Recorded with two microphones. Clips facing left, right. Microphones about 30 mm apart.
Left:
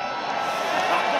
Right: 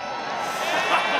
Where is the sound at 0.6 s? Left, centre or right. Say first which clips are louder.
Right 2 dB; right.